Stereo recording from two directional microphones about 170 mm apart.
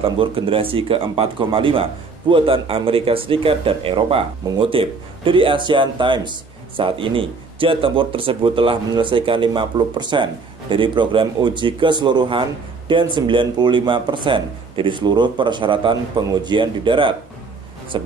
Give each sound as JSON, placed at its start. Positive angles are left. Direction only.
{"t": 0.0, "sound": "speech", "side_deg": -30}